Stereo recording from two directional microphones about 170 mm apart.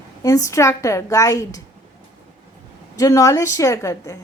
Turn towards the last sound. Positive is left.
turn(degrees=20)  # may be behind; listen again after turning